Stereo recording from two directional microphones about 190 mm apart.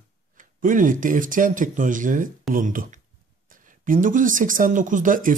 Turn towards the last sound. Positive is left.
turn(degrees=-45)  # may be behind; listen again after turning